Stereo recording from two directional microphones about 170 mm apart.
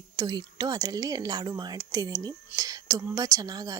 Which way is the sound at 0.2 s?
25° right (ahead or behind).